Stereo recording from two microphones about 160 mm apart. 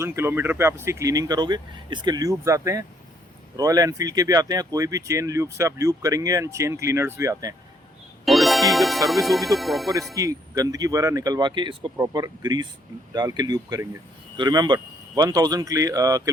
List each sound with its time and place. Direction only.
0.0 s speech: 15° right (ahead or behind)
8.2 s speech: centre (ahead or behind)
10.2 s speech: 20° right (ahead or behind)